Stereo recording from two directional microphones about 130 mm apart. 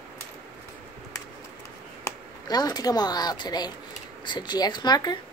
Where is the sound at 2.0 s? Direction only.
30° left (ahead or behind).